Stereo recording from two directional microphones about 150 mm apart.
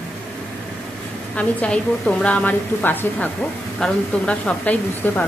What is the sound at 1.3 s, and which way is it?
A woman's voice, 10° left (ahead or behind).